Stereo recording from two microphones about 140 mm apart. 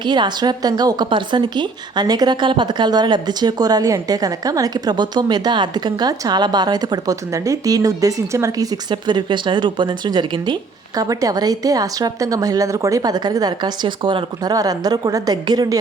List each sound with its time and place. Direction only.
0.0 s a woman's voice: 35° right (ahead or behind)